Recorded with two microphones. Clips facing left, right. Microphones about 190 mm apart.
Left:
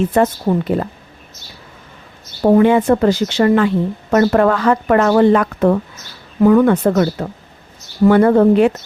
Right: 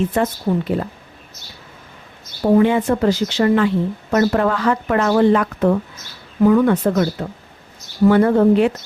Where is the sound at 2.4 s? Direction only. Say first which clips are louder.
Left 3 dB; 55° left (ahead or behind).